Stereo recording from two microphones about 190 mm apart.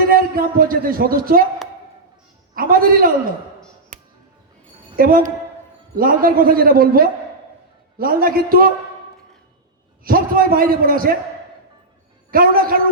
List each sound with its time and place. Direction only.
0.1 s speech: 50° right (ahead or behind)
2.6 s a man's voice: 50° right (ahead or behind)
3.9 s music: 45° right (ahead or behind)
4.9 s a man's voice: 50° right (ahead or behind)
10.0 s a man's voice: 50° right (ahead or behind)
12.3 s a man's voice: 50° right (ahead or behind)